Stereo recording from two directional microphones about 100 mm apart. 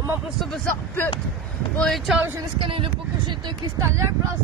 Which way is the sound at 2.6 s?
65° right (ahead or behind).